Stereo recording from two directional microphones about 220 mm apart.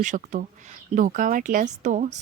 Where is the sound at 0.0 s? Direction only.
35° right (ahead or behind).